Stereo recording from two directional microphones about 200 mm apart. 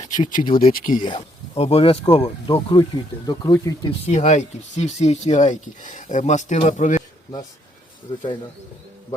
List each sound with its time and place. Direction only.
0.4 s speech: 25° left (ahead or behind)
0.7 s speech: 40° left (ahead or behind)
1.0 s speech: 25° left (ahead or behind)
4.0 s speech: 35° left (ahead or behind)